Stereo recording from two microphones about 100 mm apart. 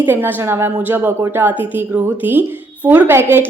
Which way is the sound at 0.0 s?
20° right (ahead or behind).